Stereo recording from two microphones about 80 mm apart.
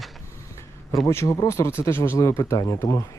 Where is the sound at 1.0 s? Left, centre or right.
Left.